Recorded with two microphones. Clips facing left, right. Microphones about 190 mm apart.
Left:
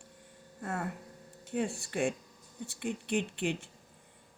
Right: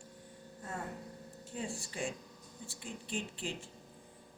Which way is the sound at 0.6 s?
70° left (ahead or behind).